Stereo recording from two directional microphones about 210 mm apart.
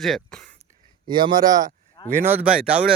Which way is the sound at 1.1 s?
20° right (ahead or behind).